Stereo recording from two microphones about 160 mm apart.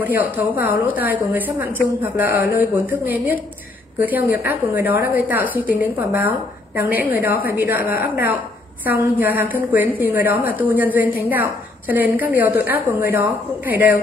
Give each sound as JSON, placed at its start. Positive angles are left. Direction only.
{"t": 0.0, "sound": "a woman's voice", "side_deg": -10}
{"t": 6.9, "sound": "a woman's voice", "side_deg": 70}
{"t": 7.2, "sound": "a woman's voice", "side_deg": -10}